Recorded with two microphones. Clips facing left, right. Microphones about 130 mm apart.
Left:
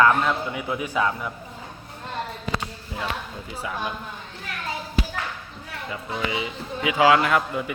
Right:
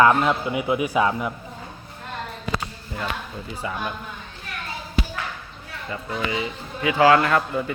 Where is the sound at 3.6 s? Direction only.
5° left (ahead or behind).